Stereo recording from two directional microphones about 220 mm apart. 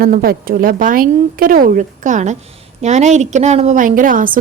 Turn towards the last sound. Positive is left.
turn(degrees=-40)  # may be behind; listen again after turning